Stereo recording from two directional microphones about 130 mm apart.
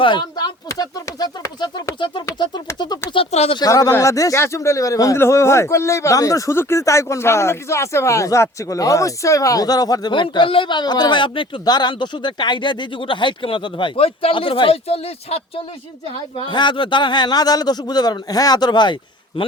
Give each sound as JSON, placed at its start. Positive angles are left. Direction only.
{"t": 0.0, "sound": "a man's voice", "side_deg": 35}